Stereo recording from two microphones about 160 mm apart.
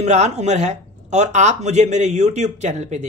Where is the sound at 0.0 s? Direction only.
45° right (ahead or behind).